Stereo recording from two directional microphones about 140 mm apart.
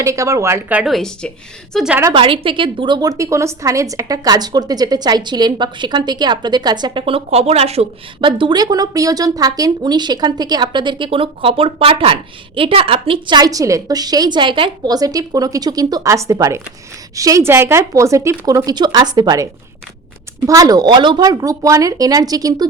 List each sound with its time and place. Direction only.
0.0 s speech: 20° right (ahead or behind)
0.8 s speech: centre (ahead or behind)
2.1 s a woman's voice: 40° right (ahead or behind)
8.2 s speech: 35° right (ahead or behind)
20.5 s speech: 25° right (ahead or behind)